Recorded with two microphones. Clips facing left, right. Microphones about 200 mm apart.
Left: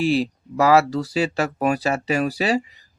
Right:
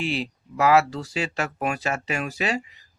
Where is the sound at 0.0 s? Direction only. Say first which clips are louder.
Left 8 dB; 40° left (ahead or behind).